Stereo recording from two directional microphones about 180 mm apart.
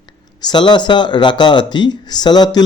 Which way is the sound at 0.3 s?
25° left (ahead or behind).